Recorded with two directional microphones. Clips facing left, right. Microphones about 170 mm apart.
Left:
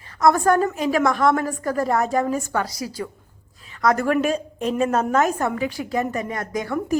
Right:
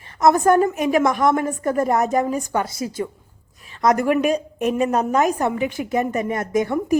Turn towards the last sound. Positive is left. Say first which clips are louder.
# right 4 dB
turn(degrees=-20)  # may be behind; listen again after turning